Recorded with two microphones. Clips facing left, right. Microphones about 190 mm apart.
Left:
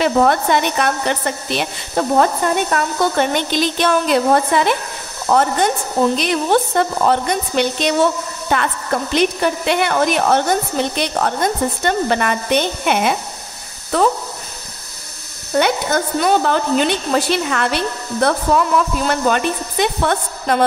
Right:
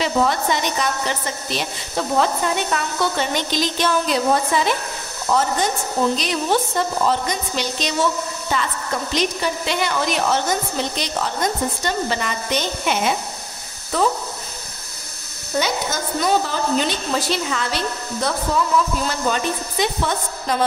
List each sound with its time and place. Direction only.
0.0 s a woman's voice: 55° left (ahead or behind)
15.5 s a woman's voice: 60° left (ahead or behind)